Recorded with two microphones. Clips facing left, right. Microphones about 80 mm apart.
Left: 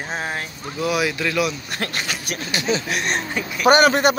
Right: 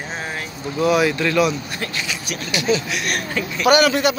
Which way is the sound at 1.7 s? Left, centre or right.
Left.